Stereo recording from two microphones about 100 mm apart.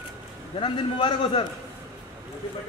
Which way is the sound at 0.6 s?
55° left (ahead or behind).